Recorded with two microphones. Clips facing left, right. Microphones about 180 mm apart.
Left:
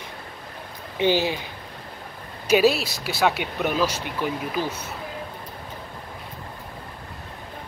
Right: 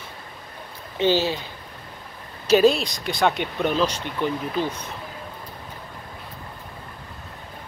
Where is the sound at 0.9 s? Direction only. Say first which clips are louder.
Right 1 dB; 15° left (ahead or behind).